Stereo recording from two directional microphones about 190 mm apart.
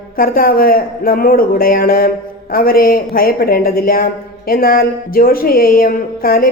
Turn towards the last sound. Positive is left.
turn(degrees=50)  # may be behind; listen again after turning